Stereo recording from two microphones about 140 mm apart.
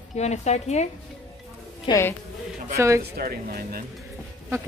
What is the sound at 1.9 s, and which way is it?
Speech, 20° left (ahead or behind).